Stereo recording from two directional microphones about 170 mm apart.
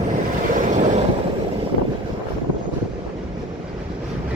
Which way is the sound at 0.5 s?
50° right (ahead or behind).